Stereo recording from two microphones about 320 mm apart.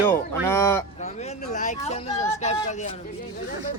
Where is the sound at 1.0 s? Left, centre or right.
Left.